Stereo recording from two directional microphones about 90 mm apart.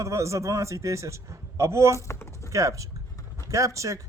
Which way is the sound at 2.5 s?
35° right (ahead or behind).